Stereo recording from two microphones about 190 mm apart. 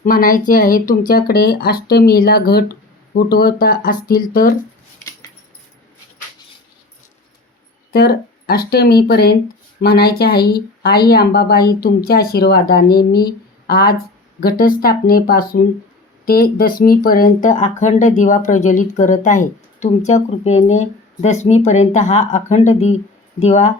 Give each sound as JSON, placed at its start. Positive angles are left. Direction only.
{"t": 0.0, "sound": "speech", "side_deg": 50}
{"t": 7.9, "sound": "speech", "side_deg": 55}